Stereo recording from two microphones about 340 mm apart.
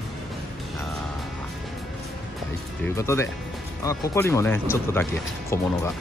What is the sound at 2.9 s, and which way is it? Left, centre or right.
Speech, centre.